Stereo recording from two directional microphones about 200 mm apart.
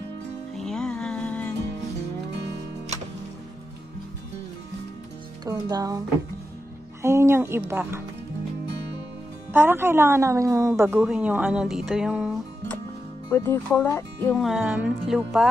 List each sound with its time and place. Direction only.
0.6 s music: centre (ahead or behind)
5.4 s a woman's voice: 20° right (ahead or behind)
9.5 s a woman's voice: 10° right (ahead or behind)
13.3 s speech: 10° left (ahead or behind); by 15.4 s 5° right (ahead or behind)